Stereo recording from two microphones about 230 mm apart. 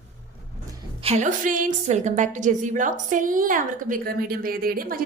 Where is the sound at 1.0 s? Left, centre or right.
Right.